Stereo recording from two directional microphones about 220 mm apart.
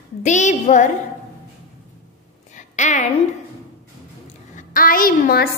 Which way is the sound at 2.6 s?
35° left (ahead or behind).